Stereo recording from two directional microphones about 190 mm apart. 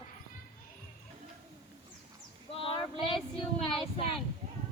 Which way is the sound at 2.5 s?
30° left (ahead or behind).